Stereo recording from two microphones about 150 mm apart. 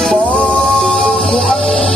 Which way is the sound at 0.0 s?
5° left (ahead or behind).